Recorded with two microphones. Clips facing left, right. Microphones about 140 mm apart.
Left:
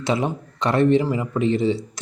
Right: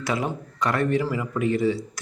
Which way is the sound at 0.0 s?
25° left (ahead or behind).